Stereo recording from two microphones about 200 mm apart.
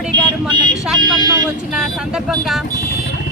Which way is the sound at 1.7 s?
5° right (ahead or behind).